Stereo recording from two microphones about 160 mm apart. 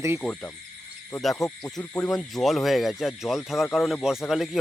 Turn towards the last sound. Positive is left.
turn(degrees=0)  # may be behind; listen again after turning